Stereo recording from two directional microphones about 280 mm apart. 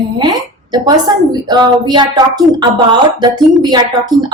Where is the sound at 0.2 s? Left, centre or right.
Centre.